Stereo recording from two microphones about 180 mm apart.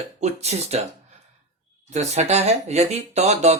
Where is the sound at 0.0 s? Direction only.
40° right (ahead or behind).